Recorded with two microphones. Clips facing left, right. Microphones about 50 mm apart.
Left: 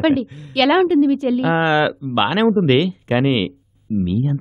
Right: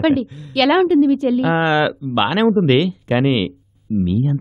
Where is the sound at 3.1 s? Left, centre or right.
Left.